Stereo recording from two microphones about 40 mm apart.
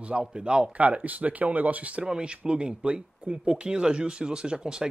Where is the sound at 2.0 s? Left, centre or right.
Right.